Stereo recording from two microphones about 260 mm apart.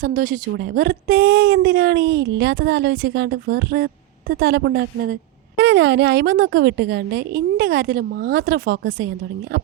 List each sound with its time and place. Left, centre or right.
0.0 s a woman's voice: right